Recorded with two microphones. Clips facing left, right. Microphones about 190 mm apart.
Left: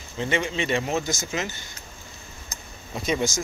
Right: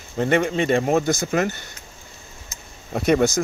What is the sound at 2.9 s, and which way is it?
Speech, 60° right (ahead or behind).